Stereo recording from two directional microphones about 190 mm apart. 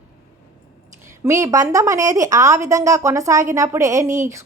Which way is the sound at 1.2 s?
15° right (ahead or behind).